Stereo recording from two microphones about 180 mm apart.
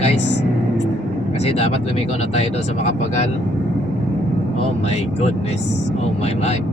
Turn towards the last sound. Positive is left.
turn(degrees=35)  # may be behind; listen again after turning